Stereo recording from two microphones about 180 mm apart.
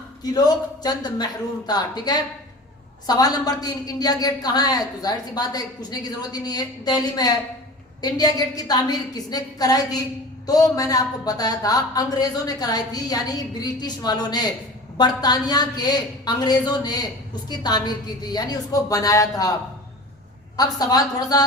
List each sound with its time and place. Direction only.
0.2 s a woman's voice: 20° left (ahead or behind)
20.6 s a woman's voice: 20° left (ahead or behind)